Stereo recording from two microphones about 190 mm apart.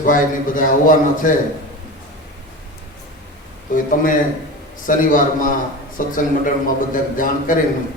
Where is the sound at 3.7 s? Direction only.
45° left (ahead or behind).